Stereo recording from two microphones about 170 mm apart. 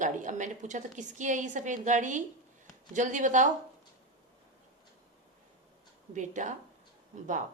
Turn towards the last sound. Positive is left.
turn(degrees=-45)  # may be behind; listen again after turning